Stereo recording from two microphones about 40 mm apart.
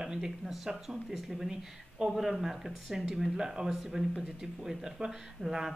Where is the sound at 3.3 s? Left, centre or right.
Centre.